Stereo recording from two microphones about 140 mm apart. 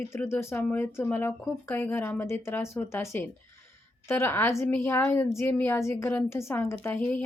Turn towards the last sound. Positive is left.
turn(degrees=15)  # may be behind; listen again after turning